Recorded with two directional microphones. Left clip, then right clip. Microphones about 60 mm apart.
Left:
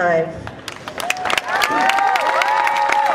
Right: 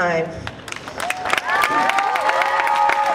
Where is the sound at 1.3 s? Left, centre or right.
Left.